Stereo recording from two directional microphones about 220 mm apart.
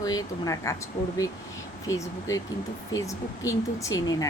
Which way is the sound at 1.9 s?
15° left (ahead or behind).